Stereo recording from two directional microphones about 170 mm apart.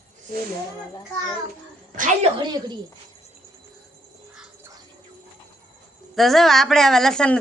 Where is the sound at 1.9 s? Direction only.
50° right (ahead or behind).